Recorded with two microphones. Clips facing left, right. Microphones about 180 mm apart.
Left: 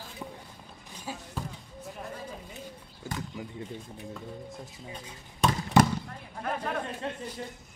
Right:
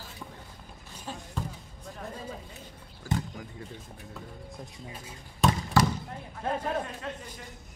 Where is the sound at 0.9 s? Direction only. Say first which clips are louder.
Even; 10° left (ahead or behind).